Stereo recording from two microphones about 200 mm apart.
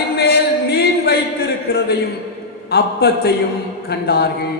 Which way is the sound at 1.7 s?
55° left (ahead or behind).